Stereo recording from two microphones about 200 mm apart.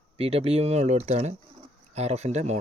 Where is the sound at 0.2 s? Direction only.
30° right (ahead or behind).